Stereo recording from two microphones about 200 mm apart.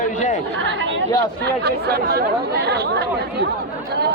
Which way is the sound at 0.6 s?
65° right (ahead or behind).